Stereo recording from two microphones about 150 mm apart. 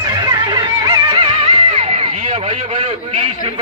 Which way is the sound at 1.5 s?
40° right (ahead or behind).